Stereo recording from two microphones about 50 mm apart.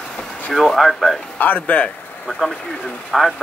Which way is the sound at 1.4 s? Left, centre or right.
Left.